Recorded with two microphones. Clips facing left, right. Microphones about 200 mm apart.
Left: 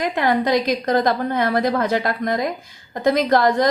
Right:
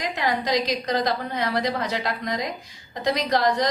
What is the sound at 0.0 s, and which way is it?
A woman's voice, 55° left (ahead or behind).